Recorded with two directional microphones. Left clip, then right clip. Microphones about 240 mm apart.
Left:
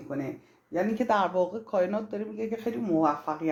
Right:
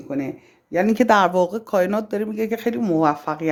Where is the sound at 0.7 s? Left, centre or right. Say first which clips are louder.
Right 10 dB; right.